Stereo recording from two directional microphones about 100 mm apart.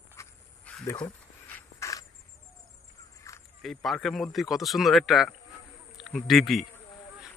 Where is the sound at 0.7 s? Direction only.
10° left (ahead or behind).